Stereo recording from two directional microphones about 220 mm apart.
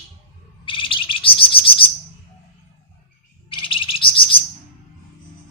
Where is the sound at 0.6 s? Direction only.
20° left (ahead or behind).